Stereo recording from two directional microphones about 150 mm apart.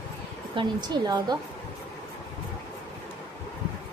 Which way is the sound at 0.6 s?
30° right (ahead or behind).